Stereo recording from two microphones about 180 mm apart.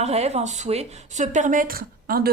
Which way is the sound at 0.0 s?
35° right (ahead or behind).